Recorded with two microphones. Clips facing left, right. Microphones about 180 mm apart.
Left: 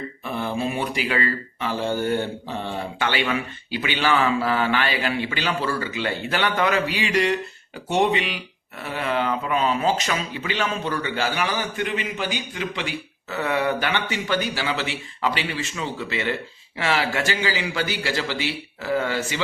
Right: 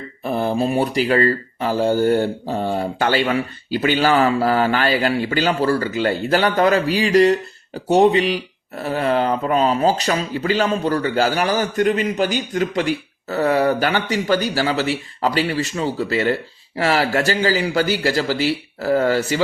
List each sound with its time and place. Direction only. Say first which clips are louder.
0.3 s speech: right 7 dB; 40° right (ahead or behind)